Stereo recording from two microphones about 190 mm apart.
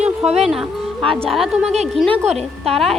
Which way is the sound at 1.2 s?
Centre (ahead or behind).